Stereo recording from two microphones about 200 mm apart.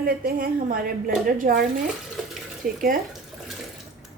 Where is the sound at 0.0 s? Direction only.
50° right (ahead or behind).